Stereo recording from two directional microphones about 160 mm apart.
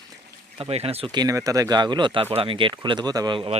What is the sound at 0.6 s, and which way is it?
Speech, 40° right (ahead or behind).